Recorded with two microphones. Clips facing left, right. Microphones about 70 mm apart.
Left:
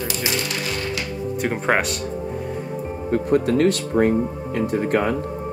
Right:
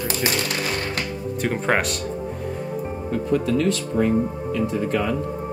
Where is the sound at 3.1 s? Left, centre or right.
Left.